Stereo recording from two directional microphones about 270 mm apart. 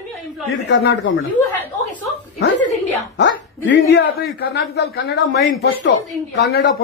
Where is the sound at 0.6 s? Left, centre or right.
Left.